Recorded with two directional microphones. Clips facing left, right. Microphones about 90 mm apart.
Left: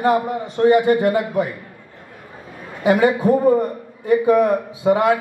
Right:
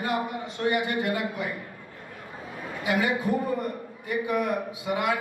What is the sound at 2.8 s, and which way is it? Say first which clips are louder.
A man's voice: left 11 dB; 35° left (ahead or behind).